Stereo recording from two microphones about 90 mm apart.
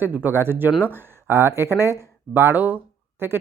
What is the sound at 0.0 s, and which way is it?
Speech, 20° right (ahead or behind).